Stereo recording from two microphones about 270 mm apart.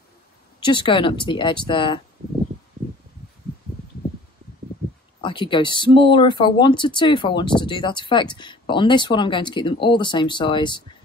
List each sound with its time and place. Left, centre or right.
0.6 s speech: centre
5.2 s speech: centre